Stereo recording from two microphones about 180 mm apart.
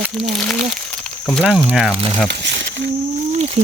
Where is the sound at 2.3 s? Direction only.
75° right (ahead or behind).